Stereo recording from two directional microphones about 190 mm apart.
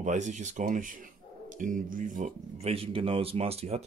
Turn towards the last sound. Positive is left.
turn(degrees=-35)  # may be behind; listen again after turning